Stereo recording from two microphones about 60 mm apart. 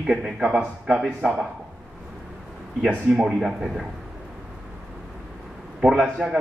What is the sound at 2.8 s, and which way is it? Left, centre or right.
Speech, centre.